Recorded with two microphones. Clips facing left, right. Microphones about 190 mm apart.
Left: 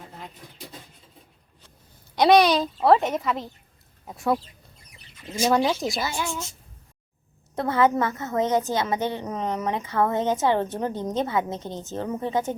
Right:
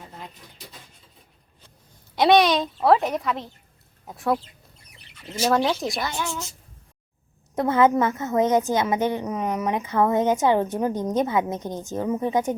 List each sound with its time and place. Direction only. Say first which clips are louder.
2.1 s a woman's voice: even; centre (ahead or behind)
5.4 s a woman's voice: even; centre (ahead or behind)
7.5 s a woman's voice: right 3 dB; 20° right (ahead or behind)